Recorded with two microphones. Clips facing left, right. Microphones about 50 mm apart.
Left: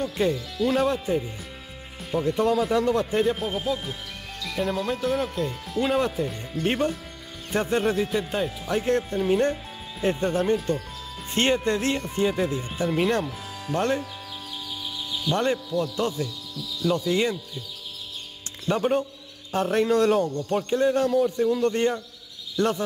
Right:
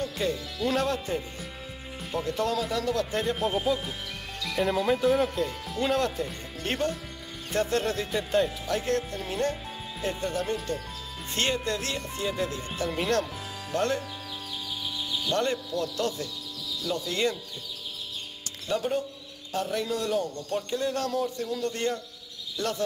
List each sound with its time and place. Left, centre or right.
0.0 s speech: centre
2.2 s speech: centre
3.2 s speech: centre
4.4 s music: centre
4.6 s speech: centre
5.8 s speech: centre
8.6 s speech: left
10.4 s speech: centre
15.2 s speech: left
18.7 s speech: left
20.5 s speech: left